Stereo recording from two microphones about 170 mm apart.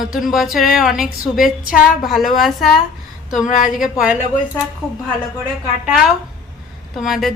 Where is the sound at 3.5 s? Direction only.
50° left (ahead or behind).